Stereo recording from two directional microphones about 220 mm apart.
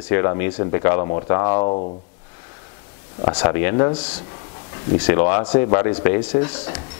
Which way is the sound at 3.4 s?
10° left (ahead or behind).